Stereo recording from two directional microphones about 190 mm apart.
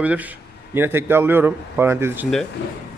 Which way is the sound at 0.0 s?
10° right (ahead or behind).